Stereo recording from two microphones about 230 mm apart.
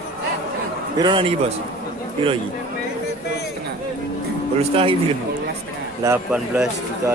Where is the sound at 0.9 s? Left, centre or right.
Centre.